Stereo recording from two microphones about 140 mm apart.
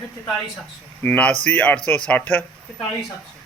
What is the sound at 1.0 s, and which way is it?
A man's voice, 10° left (ahead or behind).